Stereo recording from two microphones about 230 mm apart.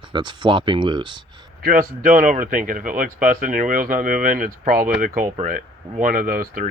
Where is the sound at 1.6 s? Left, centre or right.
Right.